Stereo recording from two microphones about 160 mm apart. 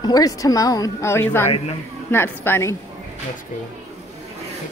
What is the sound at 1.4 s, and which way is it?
Speech, 40° left (ahead or behind).